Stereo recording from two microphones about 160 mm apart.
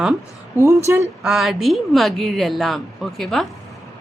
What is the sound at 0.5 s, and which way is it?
Speech, 20° right (ahead or behind).